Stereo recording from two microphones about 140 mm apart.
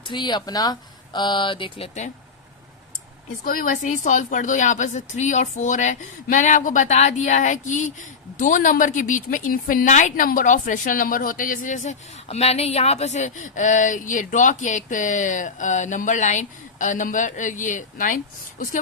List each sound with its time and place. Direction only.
0.1 s speech: 30° left (ahead or behind)
3.4 s a woman's voice: 75° left (ahead or behind)